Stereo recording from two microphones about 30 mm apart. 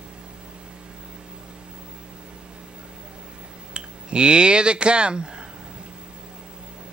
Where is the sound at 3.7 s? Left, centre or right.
Right.